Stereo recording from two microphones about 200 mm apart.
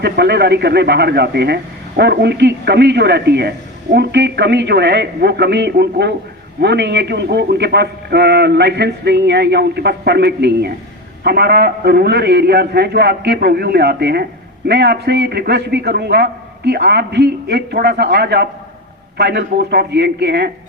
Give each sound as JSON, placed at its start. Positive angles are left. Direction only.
{"t": 0.0, "sound": "a man's voice", "side_deg": -55}